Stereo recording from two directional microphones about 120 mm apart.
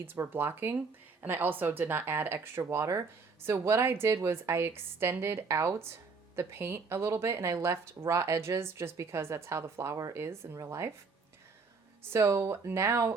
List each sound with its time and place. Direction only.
0.0 s speech: 20° right (ahead or behind)
12.1 s speech: 20° right (ahead or behind)